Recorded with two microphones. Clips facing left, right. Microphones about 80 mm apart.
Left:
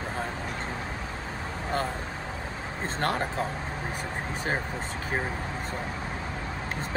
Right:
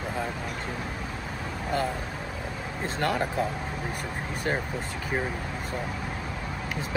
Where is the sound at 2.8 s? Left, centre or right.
Left.